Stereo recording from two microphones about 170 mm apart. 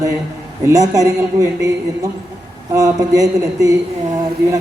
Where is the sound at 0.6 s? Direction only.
20° right (ahead or behind).